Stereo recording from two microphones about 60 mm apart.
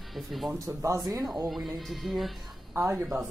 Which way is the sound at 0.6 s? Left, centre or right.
Right.